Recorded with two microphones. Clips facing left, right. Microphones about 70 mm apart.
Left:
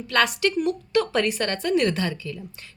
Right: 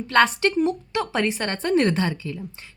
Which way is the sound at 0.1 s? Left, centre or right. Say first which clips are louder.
Right 3 dB; right.